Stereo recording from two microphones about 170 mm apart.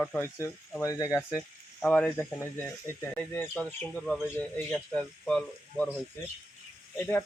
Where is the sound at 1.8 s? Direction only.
5° left (ahead or behind).